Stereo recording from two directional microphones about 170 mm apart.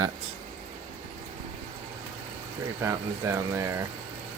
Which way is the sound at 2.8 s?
15° right (ahead or behind).